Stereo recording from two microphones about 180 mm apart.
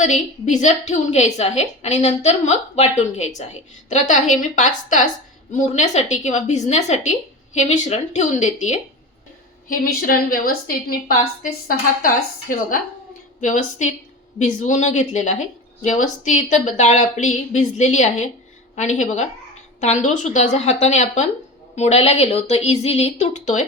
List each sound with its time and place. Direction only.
0.0 s a woman's voice: 40° left (ahead or behind)
9.6 s a woman's voice: 55° left (ahead or behind)
12.0 s a woman's voice: 50° left (ahead or behind)